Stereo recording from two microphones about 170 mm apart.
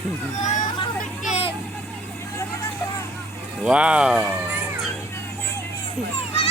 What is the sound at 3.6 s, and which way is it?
Speech, 5° right (ahead or behind).